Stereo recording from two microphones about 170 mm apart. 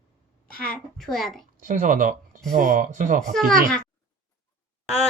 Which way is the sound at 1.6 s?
50° right (ahead or behind).